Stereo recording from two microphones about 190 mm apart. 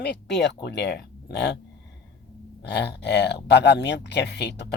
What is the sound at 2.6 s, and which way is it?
Speech, 60° left (ahead or behind).